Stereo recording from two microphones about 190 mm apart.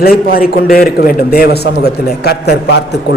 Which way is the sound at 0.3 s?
50° left (ahead or behind).